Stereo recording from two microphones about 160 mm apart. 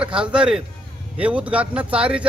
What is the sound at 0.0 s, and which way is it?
Speech, 5° right (ahead or behind).